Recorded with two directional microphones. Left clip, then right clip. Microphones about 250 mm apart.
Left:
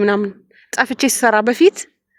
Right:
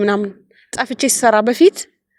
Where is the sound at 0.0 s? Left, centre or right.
Centre.